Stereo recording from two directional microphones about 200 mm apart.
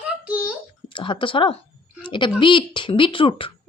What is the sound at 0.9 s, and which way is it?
Speech, 25° left (ahead or behind).